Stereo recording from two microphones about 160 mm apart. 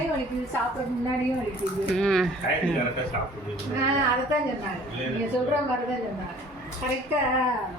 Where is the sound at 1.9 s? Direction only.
Centre (ahead or behind).